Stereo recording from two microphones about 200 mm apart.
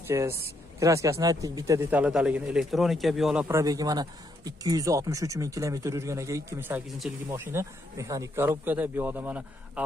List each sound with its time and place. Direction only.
0.1 s speech: 15° right (ahead or behind)
3.4 s speech: 15° right (ahead or behind)